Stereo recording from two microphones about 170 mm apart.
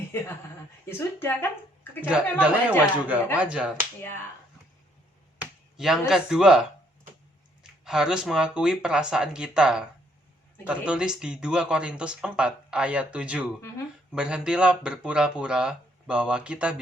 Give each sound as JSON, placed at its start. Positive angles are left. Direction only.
{"t": 0.1, "sound": "speech", "side_deg": 15}
{"t": 2.4, "sound": "speech", "side_deg": -5}
{"t": 5.4, "sound": "speech", "side_deg": -5}